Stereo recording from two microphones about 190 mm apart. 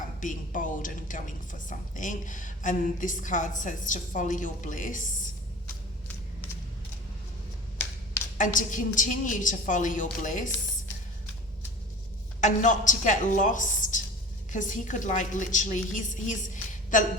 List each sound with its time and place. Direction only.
0.2 s speech: 45° left (ahead or behind)
8.4 s speech: 45° left (ahead or behind)
12.4 s a woman's voice: 40° left (ahead or behind)